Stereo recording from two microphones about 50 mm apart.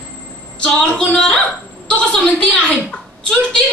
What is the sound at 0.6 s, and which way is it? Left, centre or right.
Female singing, centre.